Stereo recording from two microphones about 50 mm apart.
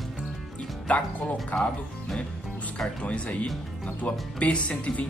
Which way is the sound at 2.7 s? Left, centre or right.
Left.